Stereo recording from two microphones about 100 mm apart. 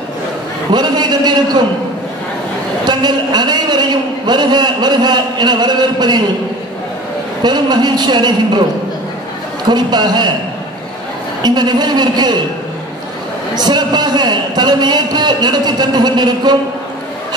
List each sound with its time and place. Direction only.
0.7 s a sound: 45° right (ahead or behind)
2.8 s a man's voice: 45° right (ahead or behind)
7.4 s a man's voice: 45° right (ahead or behind)
9.7 s a man's voice: 45° right (ahead or behind)
11.4 s a man's voice: 45° right (ahead or behind)
13.6 s a man's voice: 45° right (ahead or behind)